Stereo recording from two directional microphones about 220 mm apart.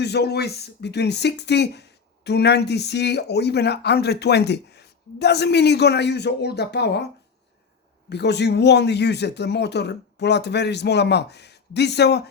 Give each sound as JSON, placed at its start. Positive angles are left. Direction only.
{"t": 0.0, "sound": "speech", "side_deg": 50}
{"t": 8.1, "sound": "speech", "side_deg": 50}